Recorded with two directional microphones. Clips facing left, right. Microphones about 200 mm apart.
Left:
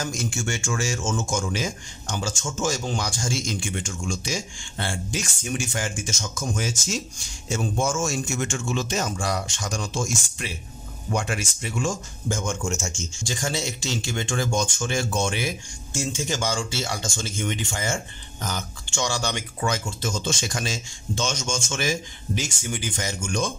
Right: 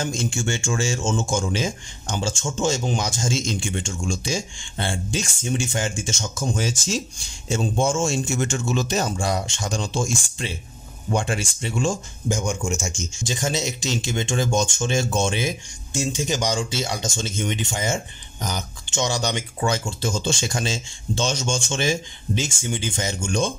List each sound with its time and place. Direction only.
0.0 s speech: 25° right (ahead or behind)
12.3 s speech: 15° right (ahead or behind)